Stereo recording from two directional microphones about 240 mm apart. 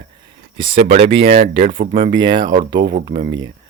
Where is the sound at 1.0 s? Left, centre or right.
Right.